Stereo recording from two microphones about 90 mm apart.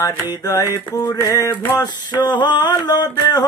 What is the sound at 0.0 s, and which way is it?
Speech, 40° left (ahead or behind).